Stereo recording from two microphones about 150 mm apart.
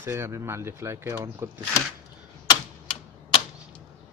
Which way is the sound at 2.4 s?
35° left (ahead or behind).